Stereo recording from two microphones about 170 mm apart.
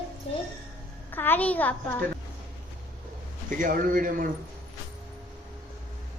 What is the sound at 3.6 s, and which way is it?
Speech, 55° right (ahead or behind).